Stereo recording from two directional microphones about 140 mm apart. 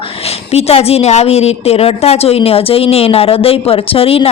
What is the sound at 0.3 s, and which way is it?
A woman's voice, 45° left (ahead or behind).